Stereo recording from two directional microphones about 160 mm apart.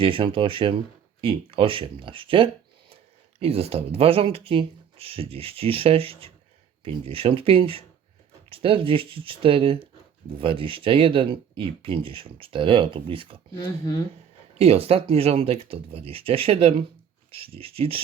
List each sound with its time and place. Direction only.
0.0 s speech: 35° right (ahead or behind)
14.6 s speech: 40° right (ahead or behind)